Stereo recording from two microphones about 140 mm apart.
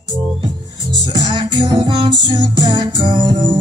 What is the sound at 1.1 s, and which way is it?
Music, 30° right (ahead or behind).